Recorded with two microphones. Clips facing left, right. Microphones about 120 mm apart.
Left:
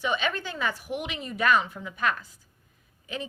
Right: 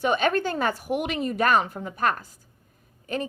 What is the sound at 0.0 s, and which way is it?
A woman's voice, 50° right (ahead or behind).